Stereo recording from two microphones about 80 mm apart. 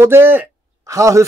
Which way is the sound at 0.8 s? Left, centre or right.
Right.